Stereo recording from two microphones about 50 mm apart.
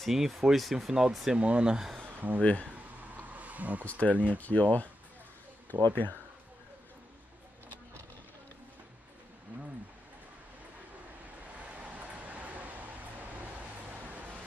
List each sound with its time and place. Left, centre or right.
0.0 s speech: centre
1.4 s speech: right
2.1 s a sound: right
2.4 s speech: left
3.0 s a sound: right
3.8 s speech: left
11.4 s vehicle: right